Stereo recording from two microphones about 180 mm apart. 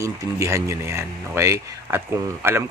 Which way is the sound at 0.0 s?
15° right (ahead or behind).